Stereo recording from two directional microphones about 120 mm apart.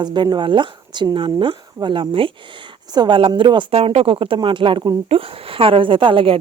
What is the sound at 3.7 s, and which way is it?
A woman's voice, 55° right (ahead or behind).